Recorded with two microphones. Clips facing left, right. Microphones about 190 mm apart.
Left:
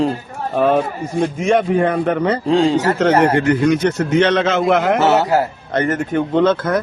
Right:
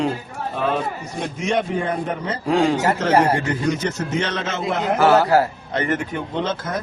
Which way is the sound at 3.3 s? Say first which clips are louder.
Left 7 dB; 65° left (ahead or behind).